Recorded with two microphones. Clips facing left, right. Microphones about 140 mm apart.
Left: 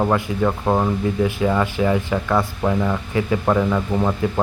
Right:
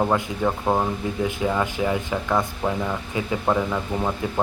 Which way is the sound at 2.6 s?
10° right (ahead or behind).